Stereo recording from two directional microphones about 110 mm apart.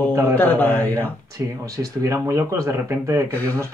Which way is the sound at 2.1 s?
30° right (ahead or behind).